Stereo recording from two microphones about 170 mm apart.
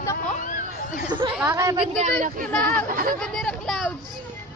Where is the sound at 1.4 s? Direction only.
15° right (ahead or behind).